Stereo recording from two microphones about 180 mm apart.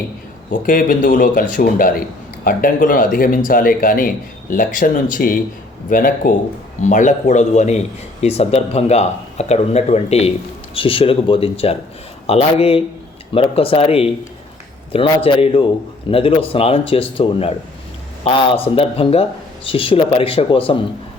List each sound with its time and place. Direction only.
0.5 s speech: 50° left (ahead or behind); by 20.8 s 30° left (ahead or behind)